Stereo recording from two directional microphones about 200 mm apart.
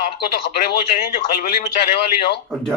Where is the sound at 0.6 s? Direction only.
50° left (ahead or behind).